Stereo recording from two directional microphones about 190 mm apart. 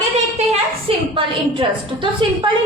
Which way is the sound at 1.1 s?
25° right (ahead or behind).